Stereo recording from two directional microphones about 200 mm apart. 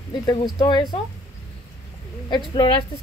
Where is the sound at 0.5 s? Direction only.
20° left (ahead or behind).